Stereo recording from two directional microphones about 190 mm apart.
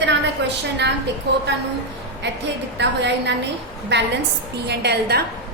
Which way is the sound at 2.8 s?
65° right (ahead or behind).